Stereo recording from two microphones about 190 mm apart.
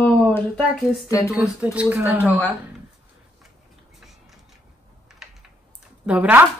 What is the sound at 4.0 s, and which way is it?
Vehicle, centre (ahead or behind).